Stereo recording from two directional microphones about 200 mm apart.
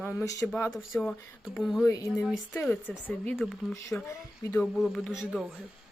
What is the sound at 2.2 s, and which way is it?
Speech, centre (ahead or behind).